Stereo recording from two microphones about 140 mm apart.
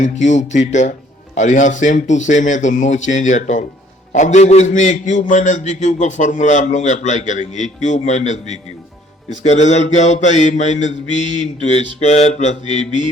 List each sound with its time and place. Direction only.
0.0 s a man's voice: 60° left (ahead or behind)